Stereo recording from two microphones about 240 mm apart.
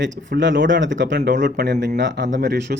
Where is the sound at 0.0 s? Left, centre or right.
Right.